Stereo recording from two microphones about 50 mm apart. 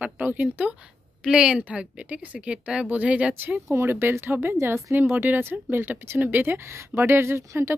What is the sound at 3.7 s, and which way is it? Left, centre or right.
Speech, right.